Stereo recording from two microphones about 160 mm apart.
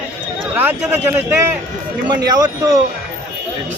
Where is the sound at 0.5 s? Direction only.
10° right (ahead or behind).